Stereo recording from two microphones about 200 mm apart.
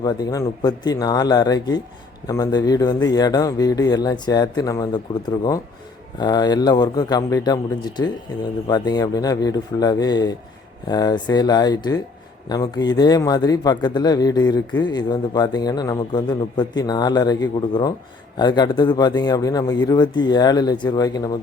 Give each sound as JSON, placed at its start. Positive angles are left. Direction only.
{"t": 0.0, "sound": "speech", "side_deg": 20}